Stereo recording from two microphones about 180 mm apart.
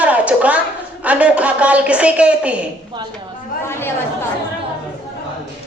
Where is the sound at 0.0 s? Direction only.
10° right (ahead or behind).